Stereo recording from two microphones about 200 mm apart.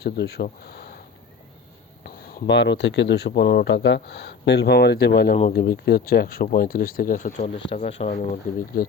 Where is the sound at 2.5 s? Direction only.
60° left (ahead or behind); by 8.2 s 30° left (ahead or behind).